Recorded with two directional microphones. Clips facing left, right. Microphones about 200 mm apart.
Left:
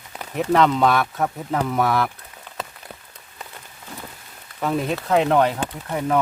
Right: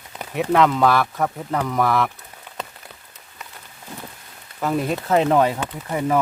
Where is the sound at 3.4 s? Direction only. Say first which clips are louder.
Left 2 dB; 30° left (ahead or behind).